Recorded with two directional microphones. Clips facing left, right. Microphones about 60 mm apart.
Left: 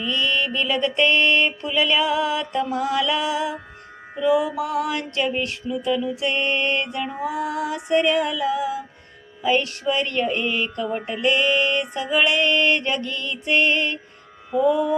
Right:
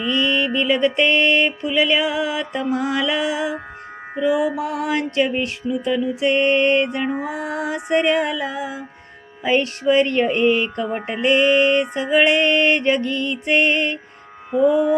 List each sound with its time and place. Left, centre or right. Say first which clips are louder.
0.0 s mantra: right 3 dB; centre
9.4 s music: right 2 dB; right
9.9 s mantra: right 6 dB; right